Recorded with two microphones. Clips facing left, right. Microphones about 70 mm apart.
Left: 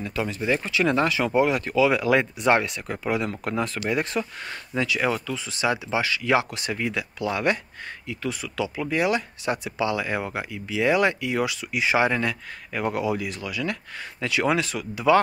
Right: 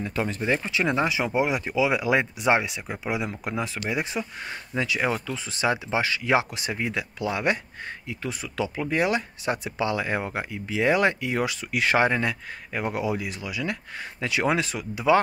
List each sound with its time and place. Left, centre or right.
0.0 s speech: right; by 4.6 s centre
4.7 s speech: right
11.7 s speech: right
12.0 s speech: right